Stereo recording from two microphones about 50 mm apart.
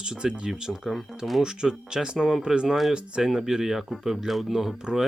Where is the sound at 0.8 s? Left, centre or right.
Centre.